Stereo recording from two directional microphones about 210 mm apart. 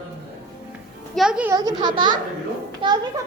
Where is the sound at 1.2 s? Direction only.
5° right (ahead or behind).